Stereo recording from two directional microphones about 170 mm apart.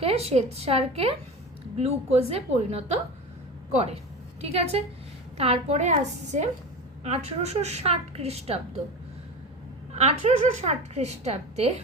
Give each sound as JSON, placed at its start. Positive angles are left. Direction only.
{"t": 0.0, "sound": "a woman's voice", "side_deg": -35}
{"t": 4.4, "sound": "a woman's voice", "side_deg": -35}
{"t": 9.9, "sound": "a woman's voice", "side_deg": -40}